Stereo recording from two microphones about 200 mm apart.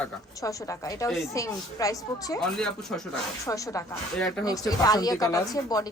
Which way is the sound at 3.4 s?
15° left (ahead or behind).